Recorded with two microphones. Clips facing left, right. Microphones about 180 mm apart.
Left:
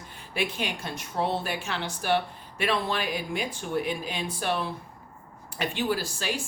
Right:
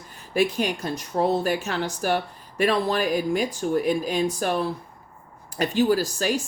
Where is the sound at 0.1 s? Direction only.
40° right (ahead or behind).